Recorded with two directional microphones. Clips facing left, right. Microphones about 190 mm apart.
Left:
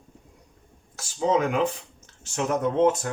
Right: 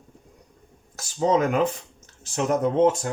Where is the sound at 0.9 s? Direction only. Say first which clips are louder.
Right 2 dB; 45° right (ahead or behind).